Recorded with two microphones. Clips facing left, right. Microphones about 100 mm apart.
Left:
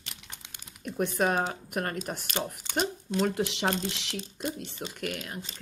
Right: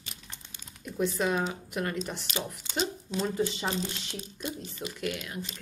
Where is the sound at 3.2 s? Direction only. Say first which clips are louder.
Even; 70° left (ahead or behind); by 4.2 s 90° left.